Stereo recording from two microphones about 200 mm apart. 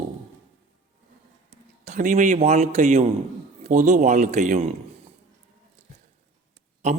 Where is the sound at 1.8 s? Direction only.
40° right (ahead or behind).